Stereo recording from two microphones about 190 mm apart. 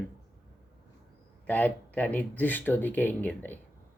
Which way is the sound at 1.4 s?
10° left (ahead or behind).